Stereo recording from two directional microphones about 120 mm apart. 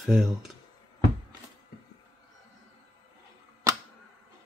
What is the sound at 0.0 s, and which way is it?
Speech, centre (ahead or behind).